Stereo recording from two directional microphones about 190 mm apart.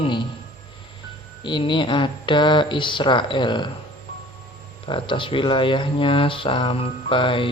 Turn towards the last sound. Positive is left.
turn(degrees=25)  # may be behind; listen again after turning